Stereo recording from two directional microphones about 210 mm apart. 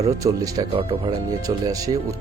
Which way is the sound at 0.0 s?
15° right (ahead or behind).